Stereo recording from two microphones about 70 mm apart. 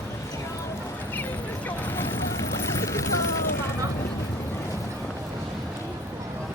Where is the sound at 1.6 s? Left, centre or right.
Left.